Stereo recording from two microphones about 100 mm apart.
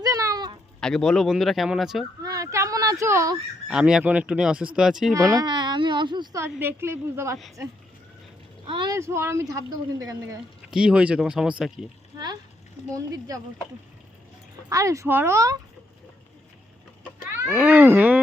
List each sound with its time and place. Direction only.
0.0 s a sound: 35° right (ahead or behind)
0.8 s speech: 5° left (ahead or behind)
2.2 s a sound: 35° right (ahead or behind)
3.7 s speech: 5° right (ahead or behind)
5.4 s speech: 50° right (ahead or behind)
6.3 s a woman's voice: 25° right (ahead or behind)
8.6 s speech: 60° right (ahead or behind)
9.0 s a woman's voice: 25° right (ahead or behind)
10.7 s speech: 10° right (ahead or behind)
12.1 s a sound: 45° right (ahead or behind)
12.9 s speech: 35° right (ahead or behind)
14.7 s a woman's voice: 35° right (ahead or behind)
17.5 s a woman's voice: 15° right (ahead or behind)